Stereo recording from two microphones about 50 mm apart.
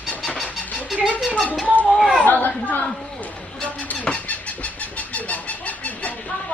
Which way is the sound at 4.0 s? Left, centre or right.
Left.